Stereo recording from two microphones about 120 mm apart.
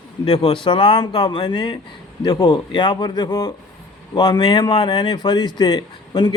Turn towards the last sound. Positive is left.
turn(degrees=35)  # may be behind; listen again after turning